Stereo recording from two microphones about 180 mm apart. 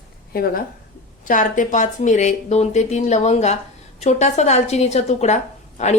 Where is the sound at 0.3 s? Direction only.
55° left (ahead or behind).